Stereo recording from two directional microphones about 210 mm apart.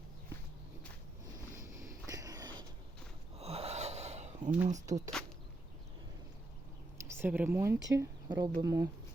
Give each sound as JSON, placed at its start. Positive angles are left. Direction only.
{"t": 1.5, "sound": "a sound", "side_deg": -15}
{"t": 3.3, "sound": "gasp", "side_deg": -30}
{"t": 4.9, "sound": "speech", "side_deg": -15}
{"t": 7.1, "sound": "speech", "side_deg": -10}